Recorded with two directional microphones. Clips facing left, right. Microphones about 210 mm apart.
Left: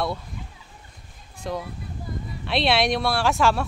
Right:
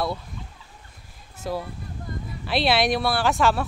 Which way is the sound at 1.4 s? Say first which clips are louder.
Right 1 dB; 5° right (ahead or behind).